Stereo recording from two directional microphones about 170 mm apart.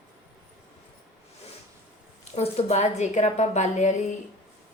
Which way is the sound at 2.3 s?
35° left (ahead or behind).